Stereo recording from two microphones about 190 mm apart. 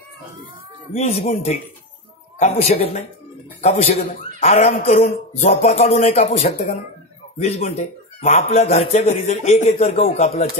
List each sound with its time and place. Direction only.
0.9 s speech: 35° left (ahead or behind)
8.5 s speech: 50° left (ahead or behind)
8.7 s speech: 35° left (ahead or behind)